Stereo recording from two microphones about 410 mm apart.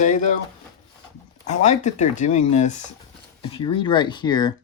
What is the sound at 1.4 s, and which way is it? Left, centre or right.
Speech, centre.